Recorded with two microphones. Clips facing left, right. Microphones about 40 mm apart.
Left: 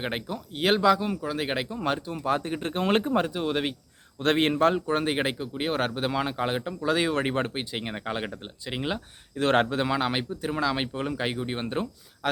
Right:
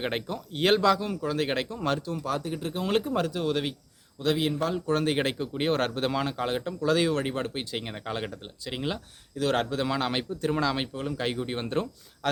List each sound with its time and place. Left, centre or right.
0.0 s speech: centre; by 3.1 s left
3.1 s speech: left
4.2 s speech: left
4.9 s speech: centre
7.2 s speech: left
7.6 s speech: centre
9.3 s speech: left
9.9 s speech: centre
10.9 s speech: left
11.3 s speech: centre